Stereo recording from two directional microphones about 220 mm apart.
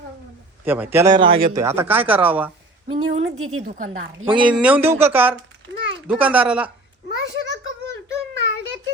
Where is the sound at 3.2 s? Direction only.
70° right (ahead or behind).